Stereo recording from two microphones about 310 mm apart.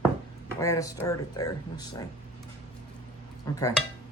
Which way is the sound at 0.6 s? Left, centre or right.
Centre.